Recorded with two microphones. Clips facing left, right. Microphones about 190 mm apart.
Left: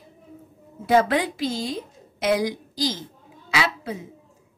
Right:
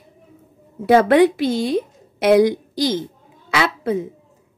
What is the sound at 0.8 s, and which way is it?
A woman's voice, 60° right (ahead or behind).